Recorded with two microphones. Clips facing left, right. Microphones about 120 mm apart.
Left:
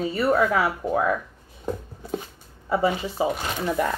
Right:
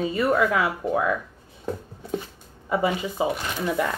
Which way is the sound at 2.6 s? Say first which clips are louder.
Left 1 dB; 35° left (ahead or behind).